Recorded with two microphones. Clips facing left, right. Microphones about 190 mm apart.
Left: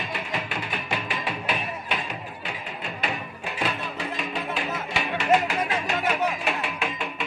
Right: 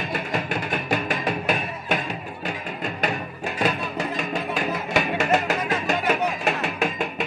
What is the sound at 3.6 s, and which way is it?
Music, 45° right (ahead or behind).